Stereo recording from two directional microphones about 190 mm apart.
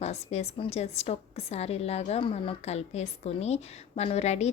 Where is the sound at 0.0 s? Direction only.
35° left (ahead or behind).